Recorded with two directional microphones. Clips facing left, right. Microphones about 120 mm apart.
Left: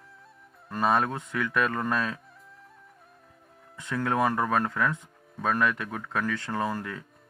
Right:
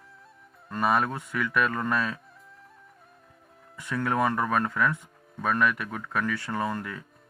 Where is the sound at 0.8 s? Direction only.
25° left (ahead or behind).